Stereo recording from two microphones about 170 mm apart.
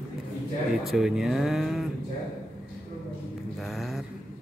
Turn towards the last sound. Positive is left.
turn(degrees=0)  # may be behind; listen again after turning